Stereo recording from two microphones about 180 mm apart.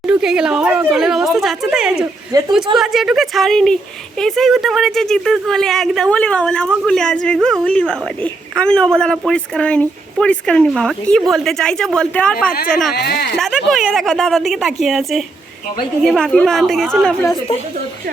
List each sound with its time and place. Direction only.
0.0 s a sound: 5° right (ahead or behind)
2.3 s a woman's voice: 20° right (ahead or behind)
2.7 s a woman's voice: centre (ahead or behind)
12.9 s speech: 60° left (ahead or behind)
13.4 s a woman's voice: centre (ahead or behind)